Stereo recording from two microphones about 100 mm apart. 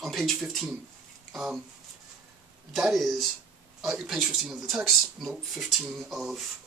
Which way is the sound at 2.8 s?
Centre (ahead or behind).